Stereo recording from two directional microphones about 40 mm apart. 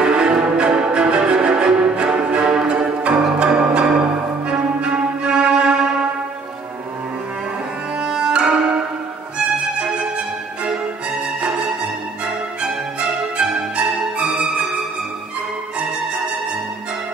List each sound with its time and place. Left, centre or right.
0.0 s music: right
8.0 s music: right
9.9 s music: right
12.6 s music: right